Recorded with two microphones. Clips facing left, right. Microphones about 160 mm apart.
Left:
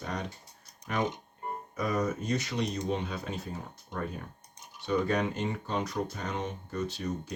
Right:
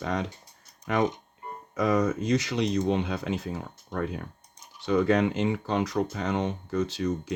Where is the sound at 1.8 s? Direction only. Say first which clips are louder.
Right 6 dB; 90° right.